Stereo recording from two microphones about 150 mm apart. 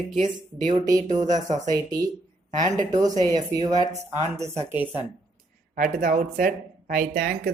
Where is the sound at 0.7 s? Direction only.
25° right (ahead or behind).